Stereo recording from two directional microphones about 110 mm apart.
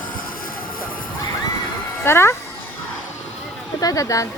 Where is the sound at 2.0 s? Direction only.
25° left (ahead or behind).